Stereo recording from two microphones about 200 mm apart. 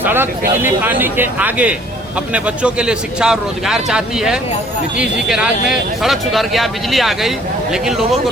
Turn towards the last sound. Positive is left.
turn(degrees=0)  # may be behind; listen again after turning